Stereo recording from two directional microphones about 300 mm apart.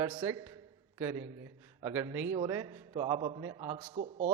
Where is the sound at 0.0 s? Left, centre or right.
Centre.